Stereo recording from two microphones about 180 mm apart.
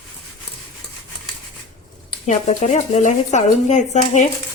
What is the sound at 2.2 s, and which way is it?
Speech, 40° left (ahead or behind).